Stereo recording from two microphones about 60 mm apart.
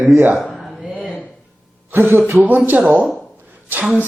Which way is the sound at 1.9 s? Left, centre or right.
Right.